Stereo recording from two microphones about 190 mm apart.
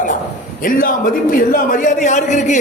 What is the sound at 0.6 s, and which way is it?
A man's voice, 45° left (ahead or behind).